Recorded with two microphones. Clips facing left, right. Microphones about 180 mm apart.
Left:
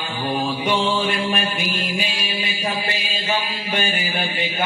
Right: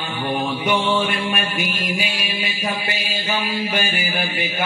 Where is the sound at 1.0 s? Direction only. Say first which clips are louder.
Left 1 dB; 30° left (ahead or behind).